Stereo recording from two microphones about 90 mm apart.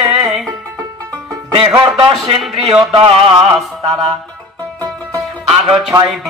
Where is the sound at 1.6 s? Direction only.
10° right (ahead or behind).